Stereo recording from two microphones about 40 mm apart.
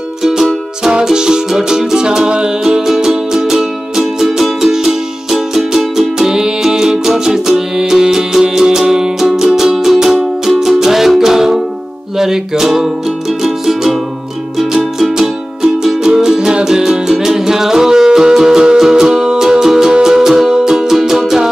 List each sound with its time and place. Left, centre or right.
0.2 s music: centre